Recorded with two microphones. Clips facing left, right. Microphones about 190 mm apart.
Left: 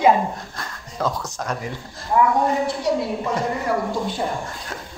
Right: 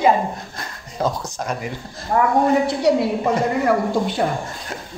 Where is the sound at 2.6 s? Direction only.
70° right (ahead or behind).